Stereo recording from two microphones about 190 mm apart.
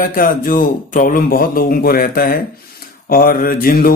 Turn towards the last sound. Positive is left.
turn(degrees=50)  # may be behind; listen again after turning